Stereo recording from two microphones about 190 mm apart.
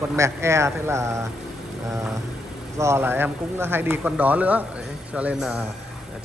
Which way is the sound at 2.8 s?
15° right (ahead or behind).